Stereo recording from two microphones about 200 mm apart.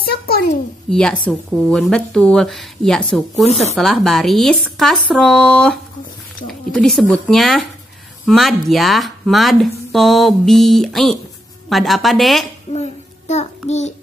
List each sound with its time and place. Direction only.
0.0 s a sound: 50° left (ahead or behind)
0.8 s speech: 5° left (ahead or behind)
12.7 s child singing: 35° left (ahead or behind)
13.7 s a child's voice: 35° left (ahead or behind)